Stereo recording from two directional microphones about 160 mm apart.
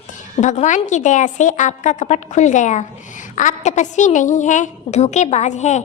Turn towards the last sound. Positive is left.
turn(degrees=45)  # may be behind; listen again after turning